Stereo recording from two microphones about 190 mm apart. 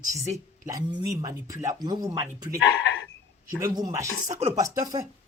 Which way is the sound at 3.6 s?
20° right (ahead or behind).